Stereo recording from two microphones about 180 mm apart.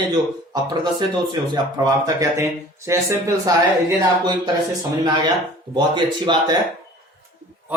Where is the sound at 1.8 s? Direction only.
20° right (ahead or behind).